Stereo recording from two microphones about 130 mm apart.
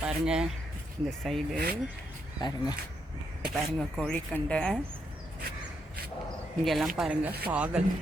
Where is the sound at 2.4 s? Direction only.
35° left (ahead or behind).